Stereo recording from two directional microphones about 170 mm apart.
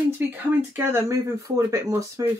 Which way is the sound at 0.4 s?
10° right (ahead or behind).